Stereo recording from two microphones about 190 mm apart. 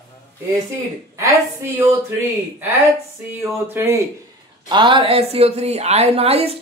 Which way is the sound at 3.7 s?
15° right (ahead or behind).